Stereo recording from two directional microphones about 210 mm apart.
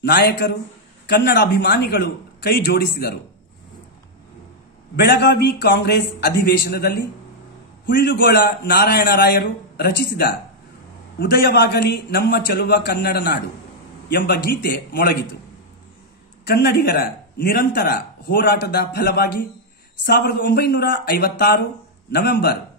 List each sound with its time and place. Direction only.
0.0 s a man's voice: 50° left (ahead or behind)
4.9 s a man's voice: 50° left (ahead or behind)
16.4 s a man's voice: 50° left (ahead or behind)